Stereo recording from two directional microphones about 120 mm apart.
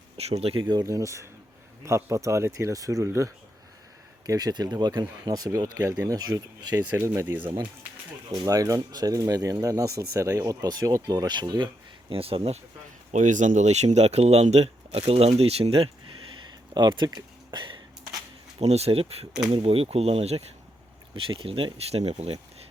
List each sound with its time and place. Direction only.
0.2 s speech: 60° right (ahead or behind)
0.7 s speech: 30° right (ahead or behind)
4.3 s speech: 35° right (ahead or behind)
6.9 s speech: 20° right (ahead or behind)
7.4 s speech: 40° right (ahead or behind)
8.3 s speech: 30° right (ahead or behind); by 12.5 s 55° right (ahead or behind)
13.1 s speech: 90° right; by 15.9 s 55° right (ahead or behind)
16.7 s speech: 40° right (ahead or behind)
18.6 s speech: 60° right (ahead or behind)
21.2 s speech: 50° right (ahead or behind); by 22.4 s 65° right (ahead or behind)